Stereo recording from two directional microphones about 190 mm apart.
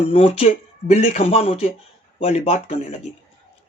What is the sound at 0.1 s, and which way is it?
Speech, 30° left (ahead or behind).